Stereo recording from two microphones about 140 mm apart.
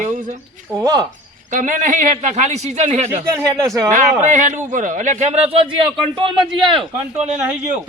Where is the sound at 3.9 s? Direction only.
65° right (ahead or behind).